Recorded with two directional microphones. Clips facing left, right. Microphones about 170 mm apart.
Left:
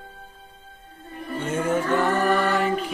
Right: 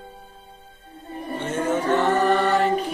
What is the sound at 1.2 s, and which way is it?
Music, 25° right (ahead or behind).